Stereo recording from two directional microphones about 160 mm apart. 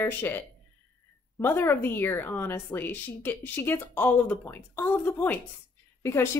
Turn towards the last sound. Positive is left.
turn(degrees=15)  # may be behind; listen again after turning